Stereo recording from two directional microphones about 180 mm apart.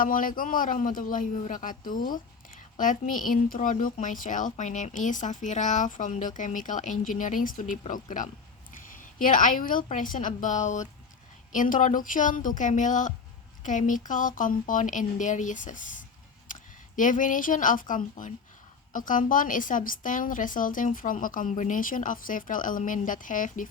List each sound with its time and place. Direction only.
0.0 s a woman's voice: 50° left (ahead or behind)